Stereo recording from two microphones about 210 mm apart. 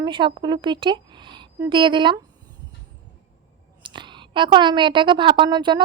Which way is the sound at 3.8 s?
20° right (ahead or behind).